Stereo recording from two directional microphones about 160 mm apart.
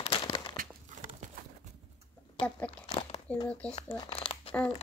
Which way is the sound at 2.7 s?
35° left (ahead or behind).